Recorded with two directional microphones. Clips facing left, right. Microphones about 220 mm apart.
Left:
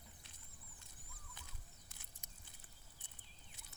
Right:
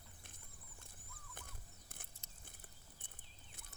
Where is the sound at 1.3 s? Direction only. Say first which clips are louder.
Right 4 dB; 55° right (ahead or behind).